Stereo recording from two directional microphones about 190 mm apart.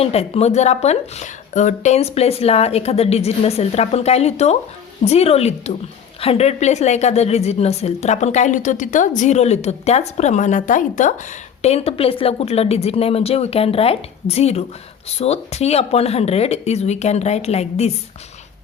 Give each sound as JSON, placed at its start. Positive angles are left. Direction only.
{"t": 0.0, "sound": "a woman's voice", "side_deg": 30}
{"t": 11.6, "sound": "a woman's voice", "side_deg": 30}